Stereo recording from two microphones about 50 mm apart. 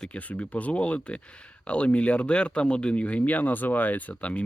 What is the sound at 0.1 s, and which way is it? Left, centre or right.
Speech, left.